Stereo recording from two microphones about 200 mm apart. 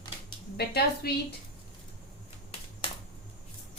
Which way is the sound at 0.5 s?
55° left (ahead or behind).